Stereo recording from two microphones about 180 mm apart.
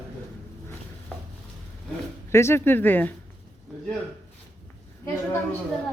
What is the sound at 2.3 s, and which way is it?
Speech, 15° left (ahead or behind).